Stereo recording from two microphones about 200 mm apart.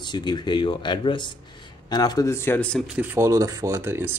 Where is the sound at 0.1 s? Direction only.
20° left (ahead or behind).